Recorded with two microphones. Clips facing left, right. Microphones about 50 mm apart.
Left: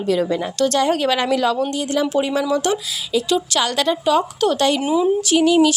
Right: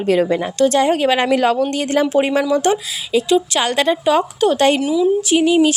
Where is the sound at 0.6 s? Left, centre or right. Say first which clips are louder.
Right 3 dB; centre.